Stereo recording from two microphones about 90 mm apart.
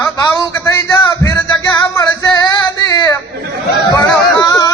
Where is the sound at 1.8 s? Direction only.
35° left (ahead or behind).